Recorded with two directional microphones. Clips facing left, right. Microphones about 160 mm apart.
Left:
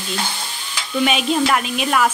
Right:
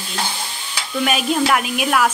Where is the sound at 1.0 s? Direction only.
5° right (ahead or behind).